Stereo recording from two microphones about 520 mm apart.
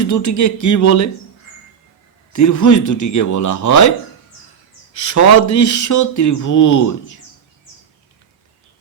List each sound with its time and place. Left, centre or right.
0.0 s speech: left
2.3 s speech: left
4.9 s speech: left